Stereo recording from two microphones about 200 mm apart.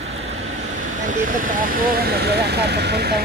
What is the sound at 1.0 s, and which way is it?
Speech, 40° right (ahead or behind).